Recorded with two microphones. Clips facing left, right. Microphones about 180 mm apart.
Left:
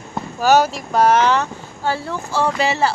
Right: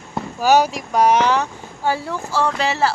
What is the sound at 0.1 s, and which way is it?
Speech, 10° right (ahead or behind).